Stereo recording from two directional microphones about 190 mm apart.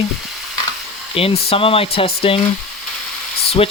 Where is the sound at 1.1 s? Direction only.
30° left (ahead or behind).